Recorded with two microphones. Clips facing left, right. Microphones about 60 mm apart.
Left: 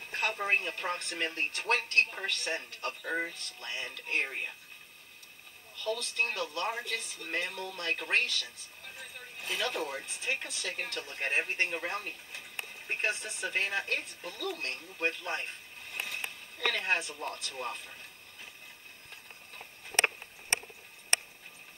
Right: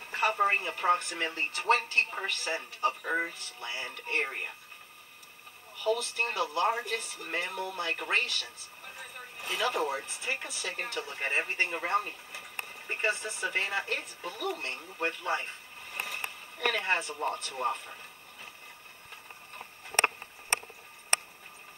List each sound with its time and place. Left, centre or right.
0.1 s television: right
0.7 s a woman's voice: right
2.3 s speech: right
2.8 s speech: right
3.5 s speech: right
6.1 s speech: right
19.5 s a sound: right